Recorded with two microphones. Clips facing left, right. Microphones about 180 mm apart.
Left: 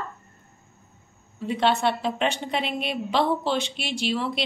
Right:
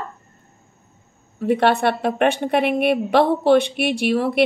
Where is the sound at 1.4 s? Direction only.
60° right (ahead or behind).